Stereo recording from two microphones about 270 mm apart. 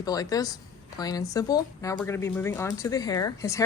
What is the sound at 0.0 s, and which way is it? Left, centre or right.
A woman's voice, centre.